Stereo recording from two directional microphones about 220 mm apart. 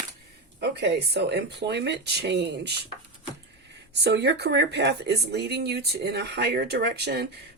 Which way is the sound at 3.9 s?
50° right (ahead or behind).